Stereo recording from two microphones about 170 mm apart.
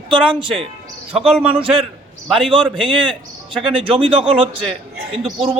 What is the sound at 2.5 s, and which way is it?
A man's voice, 30° right (ahead or behind).